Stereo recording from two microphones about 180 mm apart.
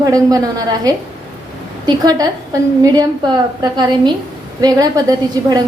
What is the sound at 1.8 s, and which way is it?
Speech, 20° right (ahead or behind).